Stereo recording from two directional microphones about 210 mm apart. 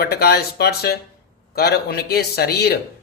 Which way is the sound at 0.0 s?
50° left (ahead or behind).